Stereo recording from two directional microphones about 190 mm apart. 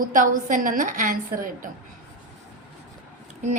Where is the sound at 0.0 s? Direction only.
45° right (ahead or behind).